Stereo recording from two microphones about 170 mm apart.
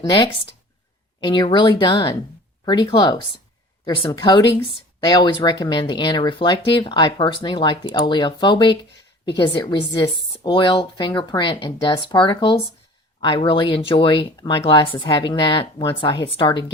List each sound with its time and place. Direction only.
1.2 s speech: 30° left (ahead or behind)